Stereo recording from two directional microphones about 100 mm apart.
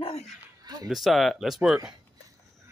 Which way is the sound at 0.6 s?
40° right (ahead or behind).